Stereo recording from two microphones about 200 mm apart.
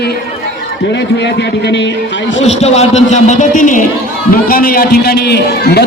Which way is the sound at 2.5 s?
35° left (ahead or behind).